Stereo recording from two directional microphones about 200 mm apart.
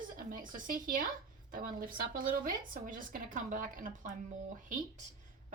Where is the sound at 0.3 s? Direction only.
40° right (ahead or behind).